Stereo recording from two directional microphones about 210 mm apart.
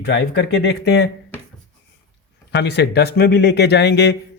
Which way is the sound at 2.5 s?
55° left (ahead or behind).